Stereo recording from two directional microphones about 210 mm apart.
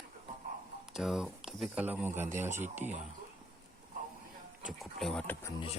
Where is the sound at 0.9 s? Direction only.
Centre (ahead or behind).